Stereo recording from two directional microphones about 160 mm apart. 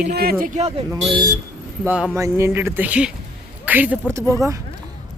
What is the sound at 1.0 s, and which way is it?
Speech, 30° right (ahead or behind).